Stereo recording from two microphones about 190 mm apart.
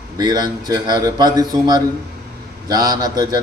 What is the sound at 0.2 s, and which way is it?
A man's voice, 20° right (ahead or behind).